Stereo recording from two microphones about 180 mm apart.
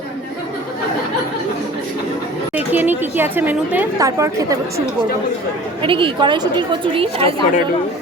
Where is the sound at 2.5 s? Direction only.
10° right (ahead or behind).